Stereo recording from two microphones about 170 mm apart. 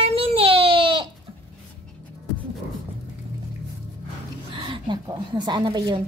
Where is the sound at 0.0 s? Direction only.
35° right (ahead or behind).